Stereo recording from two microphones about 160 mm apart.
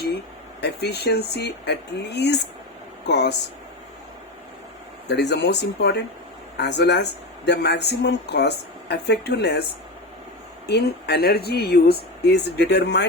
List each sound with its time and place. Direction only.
0.6 s speech: 90° left
5.0 s speech: 90° left
10.7 s speech: 90° left